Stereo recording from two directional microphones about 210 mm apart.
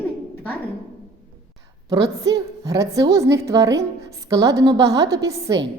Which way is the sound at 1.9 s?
15° right (ahead or behind).